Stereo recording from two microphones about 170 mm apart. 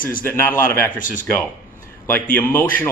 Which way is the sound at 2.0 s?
10° left (ahead or behind).